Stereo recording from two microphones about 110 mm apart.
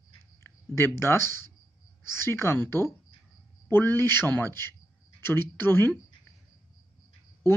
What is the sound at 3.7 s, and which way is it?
Speech, 20° left (ahead or behind).